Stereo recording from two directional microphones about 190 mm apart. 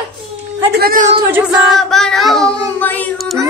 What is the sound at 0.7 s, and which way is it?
Speech, 50° right (ahead or behind).